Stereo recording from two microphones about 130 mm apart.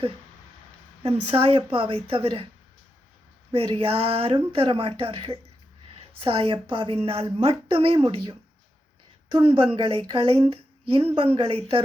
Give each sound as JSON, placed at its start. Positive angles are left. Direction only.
{"t": 1.0, "sound": "a woman's voice", "side_deg": -50}
{"t": 3.5, "sound": "a woman's voice", "side_deg": -50}